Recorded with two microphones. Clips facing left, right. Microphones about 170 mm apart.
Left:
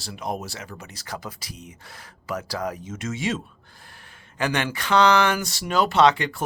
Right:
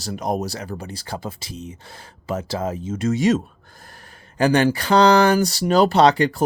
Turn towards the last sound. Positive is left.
turn(degrees=-35)  # may be behind; listen again after turning